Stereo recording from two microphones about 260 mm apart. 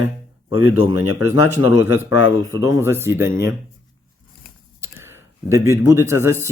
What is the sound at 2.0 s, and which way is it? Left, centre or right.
Speech, left.